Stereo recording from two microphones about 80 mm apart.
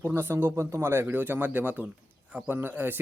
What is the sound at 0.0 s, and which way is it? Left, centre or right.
Speech, right.